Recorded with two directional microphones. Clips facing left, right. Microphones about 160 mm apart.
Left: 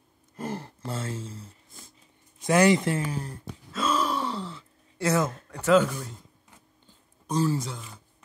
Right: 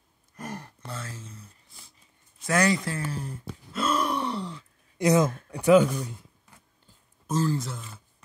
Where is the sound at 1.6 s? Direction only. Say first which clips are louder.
Left 5 dB; 50° left (ahead or behind).